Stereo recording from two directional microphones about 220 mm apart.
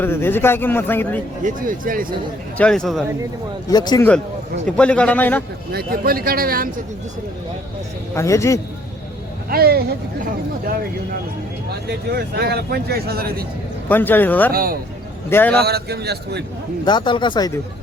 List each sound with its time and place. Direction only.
0.0 s a man's voice: 10° left (ahead or behind)
1.5 s speech: 40° right (ahead or behind)
2.6 s a man's voice: 5° left (ahead or behind)
3.7 s a man's voice: 15° left (ahead or behind)
4.6 s a man's voice: 5° left (ahead or behind)
5.7 s speech: 40° right (ahead or behind)
8.1 s a man's voice: 15° left (ahead or behind)
9.5 s speech: 45° right (ahead or behind)
11.9 s speech: 45° right (ahead or behind)
13.8 s a man's voice: 10° left (ahead or behind)
14.5 s speech: 40° right (ahead or behind)
15.3 s a man's voice: 10° left (ahead or behind)
15.6 s speech: 45° right (ahead or behind)
16.8 s speech: 20° left (ahead or behind)